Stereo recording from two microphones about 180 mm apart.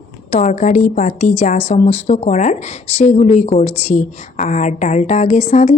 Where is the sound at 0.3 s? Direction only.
40° left (ahead or behind).